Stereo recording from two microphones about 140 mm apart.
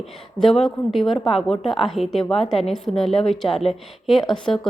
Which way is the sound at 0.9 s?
Centre (ahead or behind).